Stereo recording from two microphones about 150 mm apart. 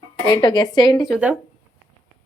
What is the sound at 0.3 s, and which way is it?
Speech, 35° left (ahead or behind).